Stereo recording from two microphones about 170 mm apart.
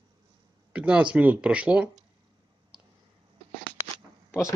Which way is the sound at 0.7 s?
5° right (ahead or behind).